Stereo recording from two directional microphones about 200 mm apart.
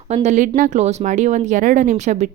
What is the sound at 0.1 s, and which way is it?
A woman's voice, 35° right (ahead or behind).